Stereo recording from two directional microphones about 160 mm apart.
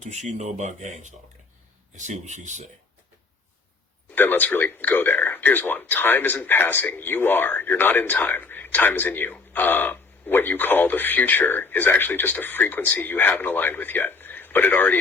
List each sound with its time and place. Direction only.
0.0 s speech: 45° right (ahead or behind)
4.1 s speech: 10° left (ahead or behind)